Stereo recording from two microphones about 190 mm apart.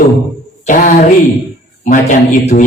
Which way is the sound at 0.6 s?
45° left (ahead or behind).